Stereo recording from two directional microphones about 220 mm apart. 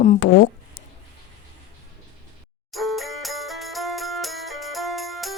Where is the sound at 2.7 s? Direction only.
Centre (ahead or behind).